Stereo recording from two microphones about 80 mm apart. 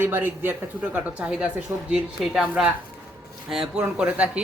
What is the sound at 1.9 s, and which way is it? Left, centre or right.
Speech, centre.